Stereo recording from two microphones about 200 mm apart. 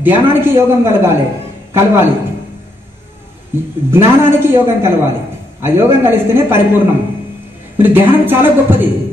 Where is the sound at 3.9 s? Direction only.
10° right (ahead or behind).